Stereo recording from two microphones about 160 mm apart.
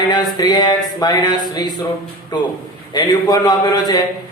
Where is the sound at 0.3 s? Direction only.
25° left (ahead or behind).